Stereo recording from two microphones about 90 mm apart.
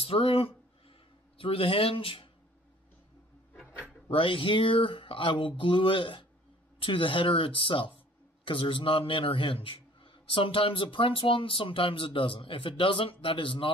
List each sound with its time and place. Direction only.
0.0 s a sound: 90° left
1.4 s speech: 90° left
4.1 s a man's voice: 75° left (ahead or behind)